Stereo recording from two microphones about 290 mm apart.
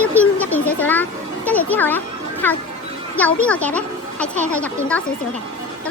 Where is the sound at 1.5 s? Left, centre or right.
Centre.